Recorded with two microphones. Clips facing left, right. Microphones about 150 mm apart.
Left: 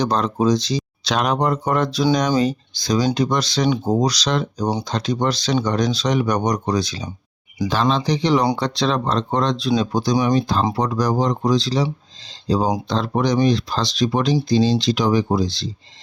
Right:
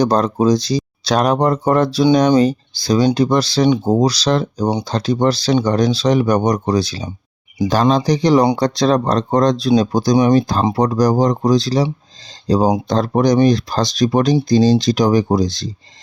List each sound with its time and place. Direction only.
0.0 s speech: 35° right (ahead or behind)
4.6 s speech: 20° right (ahead or behind)
4.9 s speech: 35° right (ahead or behind)